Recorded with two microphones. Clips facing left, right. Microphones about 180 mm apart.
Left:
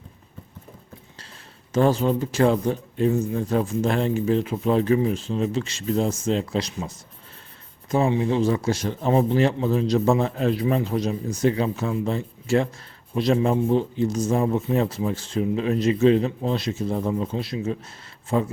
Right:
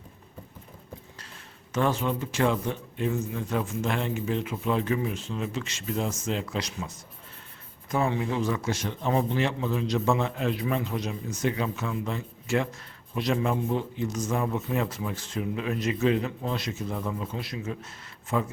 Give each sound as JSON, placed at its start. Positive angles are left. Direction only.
{"t": 1.7, "sound": "speech", "side_deg": 35}